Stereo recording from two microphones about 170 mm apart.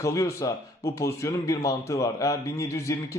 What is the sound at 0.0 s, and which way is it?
A man's voice, 20° left (ahead or behind).